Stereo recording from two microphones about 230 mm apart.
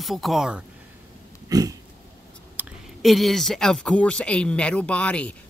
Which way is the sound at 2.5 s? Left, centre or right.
Centre.